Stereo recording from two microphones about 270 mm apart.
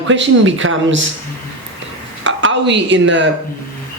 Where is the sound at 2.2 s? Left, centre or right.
Right.